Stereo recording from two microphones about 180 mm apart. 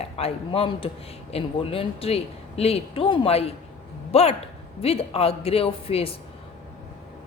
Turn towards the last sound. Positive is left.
turn(degrees=30)  # may be behind; listen again after turning